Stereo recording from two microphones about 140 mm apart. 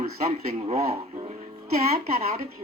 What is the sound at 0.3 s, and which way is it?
Speech, 50° right (ahead or behind).